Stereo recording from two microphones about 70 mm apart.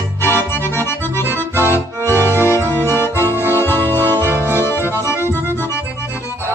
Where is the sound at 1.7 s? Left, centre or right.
Left.